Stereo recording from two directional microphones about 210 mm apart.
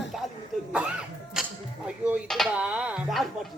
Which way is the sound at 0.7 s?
5° right (ahead or behind).